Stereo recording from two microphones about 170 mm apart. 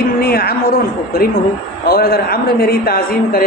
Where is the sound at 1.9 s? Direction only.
65° left (ahead or behind).